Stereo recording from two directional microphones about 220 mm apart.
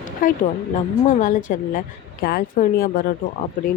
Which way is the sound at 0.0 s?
40° left (ahead or behind).